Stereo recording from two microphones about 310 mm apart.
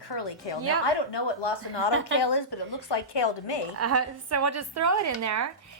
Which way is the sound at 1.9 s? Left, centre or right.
Right.